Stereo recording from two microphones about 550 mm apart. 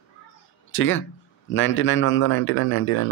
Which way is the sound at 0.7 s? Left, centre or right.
Left.